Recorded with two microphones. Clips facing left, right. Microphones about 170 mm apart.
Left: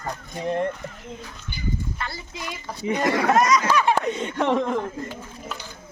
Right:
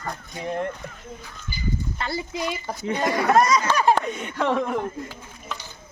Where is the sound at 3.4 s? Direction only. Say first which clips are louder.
Even; 30° right (ahead or behind).